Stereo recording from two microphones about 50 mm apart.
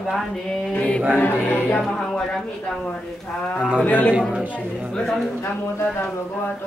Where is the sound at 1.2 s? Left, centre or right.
Left.